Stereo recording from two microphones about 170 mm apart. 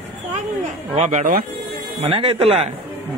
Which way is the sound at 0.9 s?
40° right (ahead or behind).